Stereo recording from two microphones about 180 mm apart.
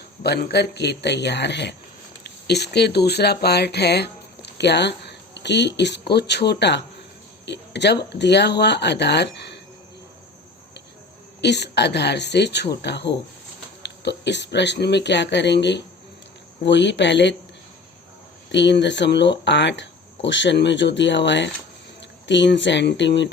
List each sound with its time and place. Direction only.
0.2 s speech: 60° left (ahead or behind)
11.3 s speech: 70° left (ahead or behind)
18.5 s speech: 80° left